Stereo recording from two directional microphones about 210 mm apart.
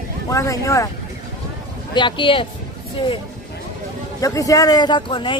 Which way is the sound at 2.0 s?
25° left (ahead or behind).